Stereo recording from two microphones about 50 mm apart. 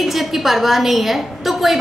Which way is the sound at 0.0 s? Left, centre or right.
Centre.